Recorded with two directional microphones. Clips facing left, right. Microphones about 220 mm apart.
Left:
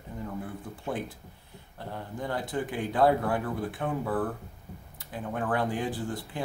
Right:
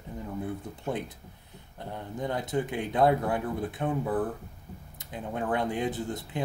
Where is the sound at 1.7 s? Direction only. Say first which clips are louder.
Right 1 dB; 20° right (ahead or behind).